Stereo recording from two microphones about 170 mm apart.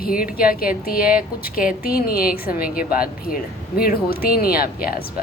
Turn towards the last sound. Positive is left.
turn(degrees=60)  # may be behind; listen again after turning